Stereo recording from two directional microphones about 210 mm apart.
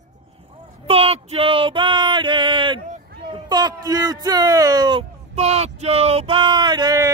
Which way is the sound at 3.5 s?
20° right (ahead or behind).